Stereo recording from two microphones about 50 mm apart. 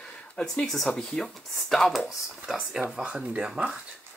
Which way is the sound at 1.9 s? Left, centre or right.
Centre.